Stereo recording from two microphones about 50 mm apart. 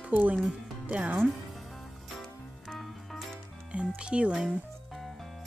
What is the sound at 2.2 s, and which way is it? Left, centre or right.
Music, centre.